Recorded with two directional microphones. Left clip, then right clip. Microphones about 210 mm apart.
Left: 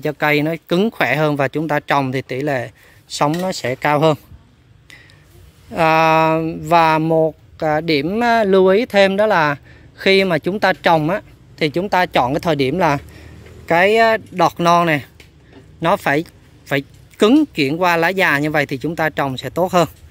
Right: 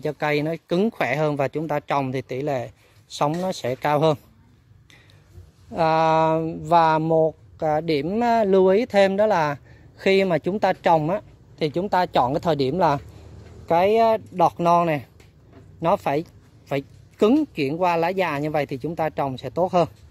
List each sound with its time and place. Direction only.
0.0 s speech: centre (ahead or behind)
5.7 s speech: centre (ahead or behind)